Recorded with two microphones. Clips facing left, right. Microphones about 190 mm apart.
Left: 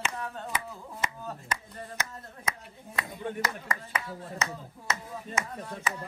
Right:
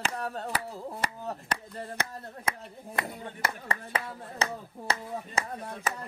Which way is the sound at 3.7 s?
30° right (ahead or behind).